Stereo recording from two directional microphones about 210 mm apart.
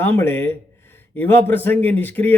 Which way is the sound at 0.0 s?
10° left (ahead or behind).